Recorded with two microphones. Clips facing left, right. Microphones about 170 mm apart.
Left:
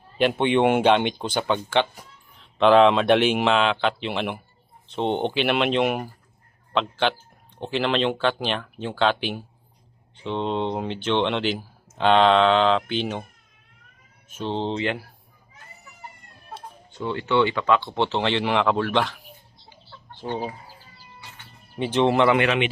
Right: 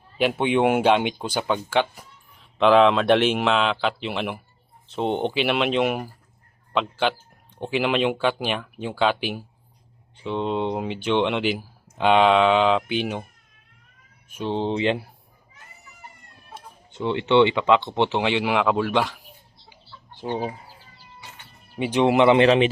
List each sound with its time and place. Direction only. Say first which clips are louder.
0.2 s speech: left 1 dB; 5° right (ahead or behind)
14.3 s speech: right 2 dB; 10° right (ahead or behind)
16.9 s speech: right 4 dB; 20° right (ahead or behind)
20.2 s speech: right 2 dB; 15° right (ahead or behind)
21.8 s speech: right 1 dB; 15° right (ahead or behind); by 22.7 s 35° right (ahead or behind)